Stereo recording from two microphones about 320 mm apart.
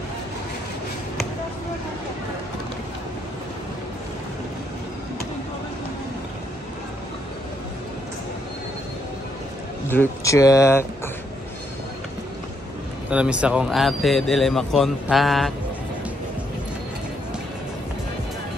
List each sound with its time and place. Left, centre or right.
9.8 s speech: centre
13.1 s speech: centre